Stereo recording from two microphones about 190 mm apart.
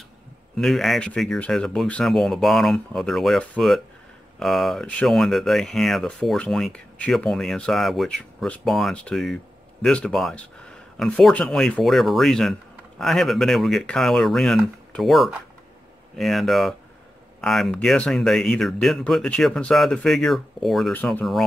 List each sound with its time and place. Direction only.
0.6 s speech: centre (ahead or behind)